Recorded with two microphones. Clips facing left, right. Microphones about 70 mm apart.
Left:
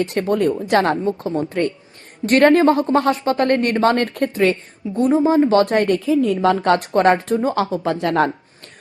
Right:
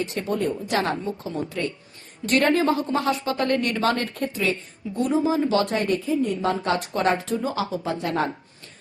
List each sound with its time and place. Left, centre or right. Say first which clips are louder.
0.0 s a woman's voice: left 7 dB; left
4.9 s a woman's voice: left 7 dB; left
6.2 s a woman's voice: left 8 dB; left